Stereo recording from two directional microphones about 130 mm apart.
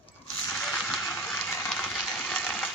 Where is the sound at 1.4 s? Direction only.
20° left (ahead or behind).